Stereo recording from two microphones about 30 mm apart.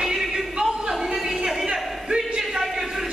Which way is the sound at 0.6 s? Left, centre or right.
Right.